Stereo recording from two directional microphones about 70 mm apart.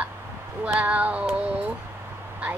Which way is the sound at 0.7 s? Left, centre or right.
Centre.